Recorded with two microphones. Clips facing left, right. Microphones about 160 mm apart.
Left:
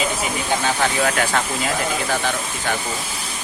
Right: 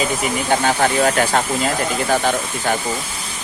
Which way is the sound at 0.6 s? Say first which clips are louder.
Right 4 dB; 40° right (ahead or behind).